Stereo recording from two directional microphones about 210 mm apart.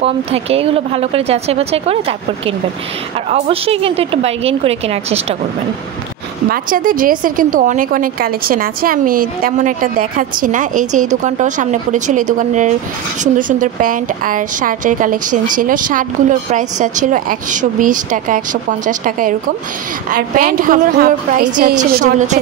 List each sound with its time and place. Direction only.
0.0 s speech: 30° right (ahead or behind)
6.5 s a woman's voice: 40° right (ahead or behind)